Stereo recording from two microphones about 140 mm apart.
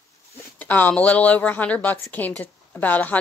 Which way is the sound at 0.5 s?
10° left (ahead or behind).